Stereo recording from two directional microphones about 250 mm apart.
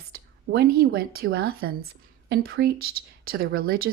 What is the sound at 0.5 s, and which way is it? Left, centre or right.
A woman's voice, right.